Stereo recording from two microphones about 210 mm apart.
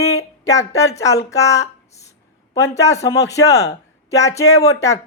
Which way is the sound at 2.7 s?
15° left (ahead or behind).